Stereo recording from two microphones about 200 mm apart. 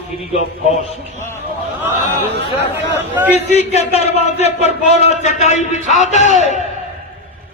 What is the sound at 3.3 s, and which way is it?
Speech, 35° left (ahead or behind).